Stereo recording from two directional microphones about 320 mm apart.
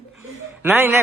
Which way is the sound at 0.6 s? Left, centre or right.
Centre.